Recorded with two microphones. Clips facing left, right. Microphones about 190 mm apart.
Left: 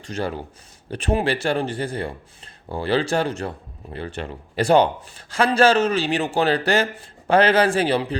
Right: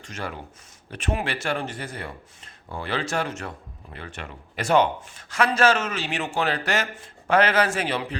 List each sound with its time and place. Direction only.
0.0 s a man's voice: 30° left (ahead or behind)